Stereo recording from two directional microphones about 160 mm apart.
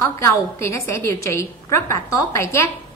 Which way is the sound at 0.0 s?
15° left (ahead or behind).